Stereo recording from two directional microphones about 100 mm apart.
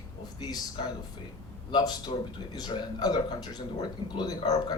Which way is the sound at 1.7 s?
45° left (ahead or behind).